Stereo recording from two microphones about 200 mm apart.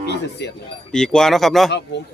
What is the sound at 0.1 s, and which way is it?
Speech, 60° left (ahead or behind).